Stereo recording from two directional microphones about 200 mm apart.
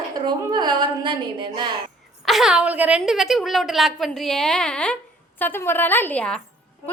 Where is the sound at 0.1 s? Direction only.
20° right (ahead or behind).